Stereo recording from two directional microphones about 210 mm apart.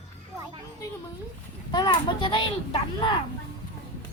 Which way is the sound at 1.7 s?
20° left (ahead or behind).